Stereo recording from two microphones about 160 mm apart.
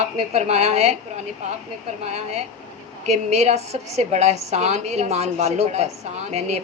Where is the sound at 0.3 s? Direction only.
45° right (ahead or behind).